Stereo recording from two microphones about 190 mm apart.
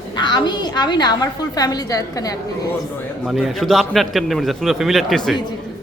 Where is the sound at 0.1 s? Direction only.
25° left (ahead or behind).